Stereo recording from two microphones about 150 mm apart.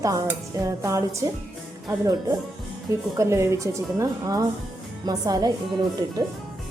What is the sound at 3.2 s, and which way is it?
Speech, 20° right (ahead or behind).